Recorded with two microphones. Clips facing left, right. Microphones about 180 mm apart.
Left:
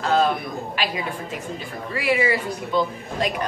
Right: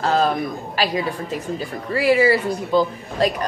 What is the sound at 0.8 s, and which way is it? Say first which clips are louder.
A man's voice: right 7 dB; 35° right (ahead or behind).